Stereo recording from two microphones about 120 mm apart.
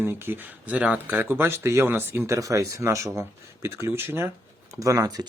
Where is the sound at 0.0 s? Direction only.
20° right (ahead or behind).